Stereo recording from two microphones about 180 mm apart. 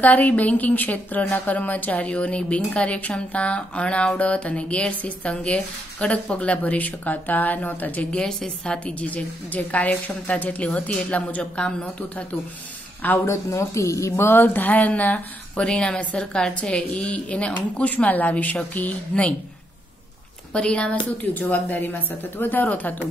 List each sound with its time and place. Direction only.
0.0 s a woman's voice: 10° left (ahead or behind)
20.5 s a woman's voice: 5° left (ahead or behind)